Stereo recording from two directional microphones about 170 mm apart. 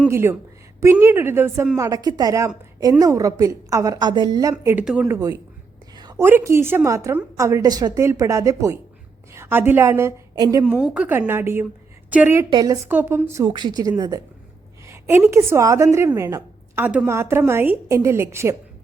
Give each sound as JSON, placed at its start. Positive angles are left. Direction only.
{"t": 0.1, "sound": "a woman's voice", "side_deg": -15}
{"t": 4.5, "sound": "a woman's voice", "side_deg": -10}
{"t": 6.0, "sound": "a sound", "side_deg": -25}
{"t": 6.2, "sound": "a woman's voice", "side_deg": -15}
{"t": 10.7, "sound": "a woman's voice", "side_deg": -5}
{"t": 12.5, "sound": "a woman's voice", "side_deg": -25}
{"t": 12.9, "sound": "a woman's voice", "side_deg": -10}
{"t": 13.4, "sound": "a woman's voice", "side_deg": -25}